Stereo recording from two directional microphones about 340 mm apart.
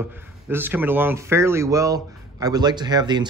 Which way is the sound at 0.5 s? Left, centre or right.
Centre.